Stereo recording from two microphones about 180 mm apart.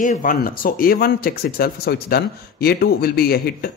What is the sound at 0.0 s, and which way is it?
Speech, 45° left (ahead or behind).